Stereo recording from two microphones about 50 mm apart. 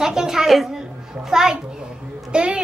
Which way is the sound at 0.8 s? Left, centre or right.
Centre.